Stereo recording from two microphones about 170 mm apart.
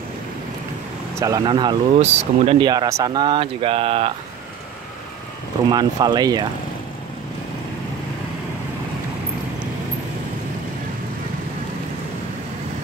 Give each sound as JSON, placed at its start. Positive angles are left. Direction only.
{"t": 1.1, "sound": "speech", "side_deg": -20}
{"t": 2.0, "sound": "speech", "side_deg": -40}
{"t": 5.7, "sound": "speech", "side_deg": -25}